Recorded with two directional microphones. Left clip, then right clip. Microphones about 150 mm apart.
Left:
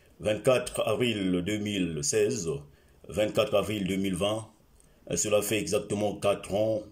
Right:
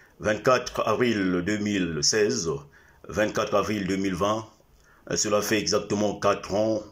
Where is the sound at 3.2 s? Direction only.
30° right (ahead or behind).